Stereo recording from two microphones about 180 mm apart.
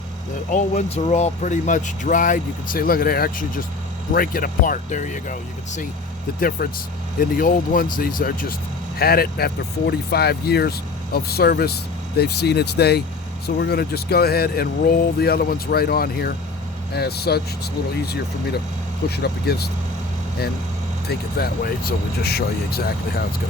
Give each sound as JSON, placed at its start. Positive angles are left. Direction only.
{"t": 0.5, "sound": "speech", "side_deg": 40}
{"t": 6.6, "sound": "speech", "side_deg": 55}
{"t": 21.3, "sound": "speech", "side_deg": 55}